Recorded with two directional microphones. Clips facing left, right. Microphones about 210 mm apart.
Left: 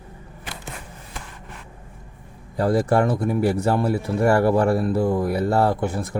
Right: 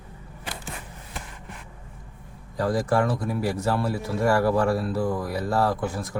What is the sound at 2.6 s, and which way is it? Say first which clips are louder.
Speech: left 4 dB; 25° left (ahead or behind).